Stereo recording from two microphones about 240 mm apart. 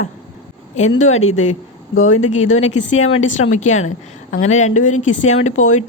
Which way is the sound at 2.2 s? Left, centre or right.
Left.